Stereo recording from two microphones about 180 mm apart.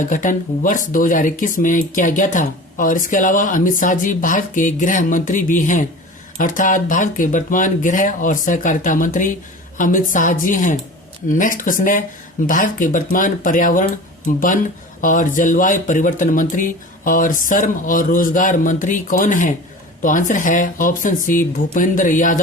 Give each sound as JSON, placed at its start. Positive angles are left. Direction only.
{"t": 0.1, "sound": "speech", "side_deg": 45}